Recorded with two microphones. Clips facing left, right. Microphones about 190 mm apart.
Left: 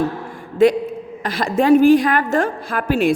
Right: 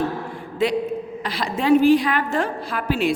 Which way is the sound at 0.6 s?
45° left (ahead or behind).